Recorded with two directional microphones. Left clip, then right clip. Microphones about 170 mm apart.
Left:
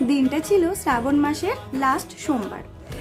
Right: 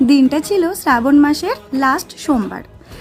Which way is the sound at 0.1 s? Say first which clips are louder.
Right 6 dB; 45° right (ahead or behind).